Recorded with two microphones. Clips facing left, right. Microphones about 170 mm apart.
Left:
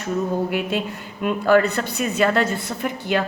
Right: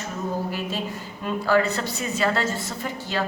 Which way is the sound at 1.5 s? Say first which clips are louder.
Left 4 dB; 60° left (ahead or behind).